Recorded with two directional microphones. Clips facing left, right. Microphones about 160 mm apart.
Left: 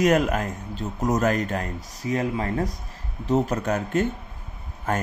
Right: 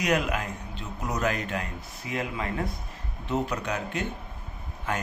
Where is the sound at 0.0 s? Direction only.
45° left (ahead or behind).